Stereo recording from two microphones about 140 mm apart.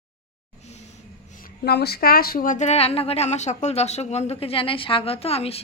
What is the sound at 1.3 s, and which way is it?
A woman's voice, 90° left.